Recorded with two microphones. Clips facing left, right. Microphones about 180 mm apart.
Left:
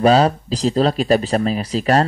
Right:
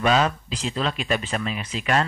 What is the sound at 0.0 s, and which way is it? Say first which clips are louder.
Speech: left 7 dB; 35° left (ahead or behind).